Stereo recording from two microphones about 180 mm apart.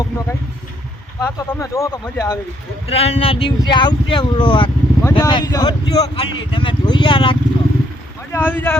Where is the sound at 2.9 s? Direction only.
35° left (ahead or behind).